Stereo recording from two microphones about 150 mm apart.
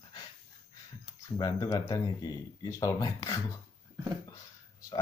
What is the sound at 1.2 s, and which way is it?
Speech, 25° left (ahead or behind).